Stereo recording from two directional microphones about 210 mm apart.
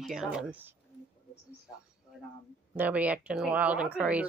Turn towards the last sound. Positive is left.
turn(degrees=-5)  # may be behind; listen again after turning